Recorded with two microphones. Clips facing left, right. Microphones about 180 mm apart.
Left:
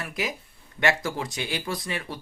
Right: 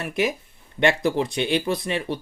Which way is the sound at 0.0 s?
25° right (ahead or behind).